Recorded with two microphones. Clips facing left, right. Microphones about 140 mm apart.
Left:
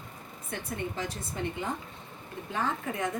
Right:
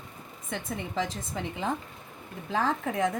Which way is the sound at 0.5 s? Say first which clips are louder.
Right 3 dB; 90° right.